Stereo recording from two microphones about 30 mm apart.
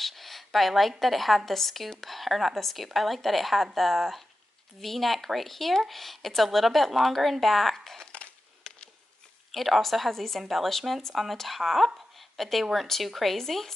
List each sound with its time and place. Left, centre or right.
0.0 s speech: centre
8.6 s a sound: left
9.5 s speech: centre
13.4 s speech: centre